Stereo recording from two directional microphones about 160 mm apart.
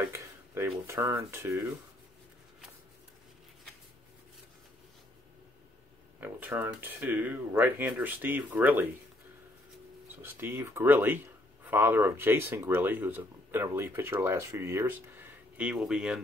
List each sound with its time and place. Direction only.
0.0 s speech: 15° right (ahead or behind)
6.1 s speech: 10° right (ahead or behind)
10.0 s speech: 15° right (ahead or behind)